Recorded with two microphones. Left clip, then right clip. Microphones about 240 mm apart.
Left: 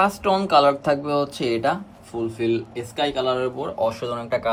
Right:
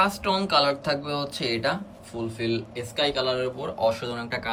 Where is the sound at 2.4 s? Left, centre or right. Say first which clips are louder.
Left 4 dB; left.